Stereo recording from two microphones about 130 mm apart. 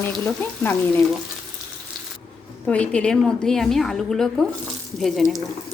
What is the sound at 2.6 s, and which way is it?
A woman's voice, 5° left (ahead or behind).